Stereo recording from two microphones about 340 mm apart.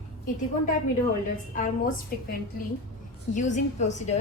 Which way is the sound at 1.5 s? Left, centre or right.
Left.